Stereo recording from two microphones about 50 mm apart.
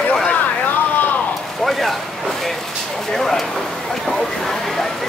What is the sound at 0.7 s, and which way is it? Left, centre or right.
Vehicle, left.